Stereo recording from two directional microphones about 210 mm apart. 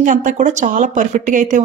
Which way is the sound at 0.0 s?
35° right (ahead or behind).